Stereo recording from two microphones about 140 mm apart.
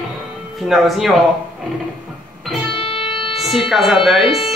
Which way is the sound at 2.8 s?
40° left (ahead or behind).